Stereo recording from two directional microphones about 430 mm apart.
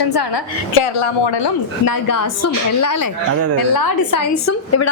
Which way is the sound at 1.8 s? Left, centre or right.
Left.